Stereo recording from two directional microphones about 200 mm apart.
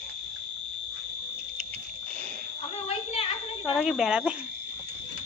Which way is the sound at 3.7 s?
Centre (ahead or behind).